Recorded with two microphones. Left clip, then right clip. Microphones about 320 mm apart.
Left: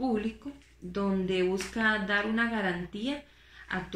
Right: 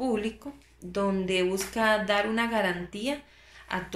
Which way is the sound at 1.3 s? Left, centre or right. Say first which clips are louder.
Right 2 dB; centre.